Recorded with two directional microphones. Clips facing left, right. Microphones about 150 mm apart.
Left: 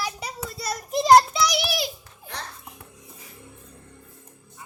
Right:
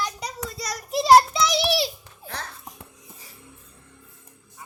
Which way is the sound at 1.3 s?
25° right (ahead or behind).